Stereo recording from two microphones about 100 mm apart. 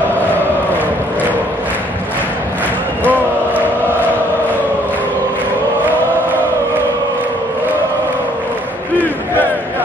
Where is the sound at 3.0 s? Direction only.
20° left (ahead or behind).